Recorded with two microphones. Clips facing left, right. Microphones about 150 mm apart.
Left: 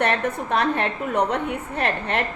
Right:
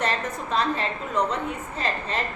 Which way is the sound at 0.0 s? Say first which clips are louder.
Left 5 dB; 60° left (ahead or behind).